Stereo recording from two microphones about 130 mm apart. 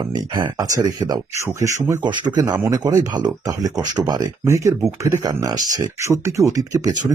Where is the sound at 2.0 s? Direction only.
35° right (ahead or behind).